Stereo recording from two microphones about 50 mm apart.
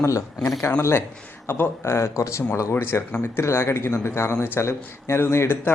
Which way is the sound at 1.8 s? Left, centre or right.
Left.